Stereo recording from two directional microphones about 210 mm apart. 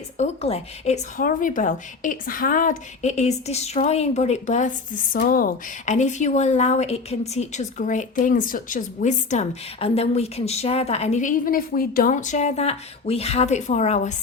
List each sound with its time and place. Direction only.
0.2 s speech: 30° left (ahead or behind)